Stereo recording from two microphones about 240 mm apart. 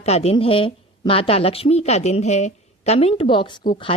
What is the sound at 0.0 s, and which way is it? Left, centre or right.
A woman's voice, left.